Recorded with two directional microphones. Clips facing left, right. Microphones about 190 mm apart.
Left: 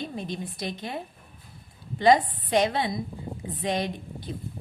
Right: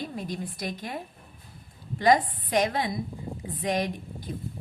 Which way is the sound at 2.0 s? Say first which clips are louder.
Left 2 dB; 25° left (ahead or behind).